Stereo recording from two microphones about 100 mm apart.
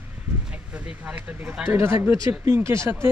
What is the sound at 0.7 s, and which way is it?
Speech, 15° right (ahead or behind).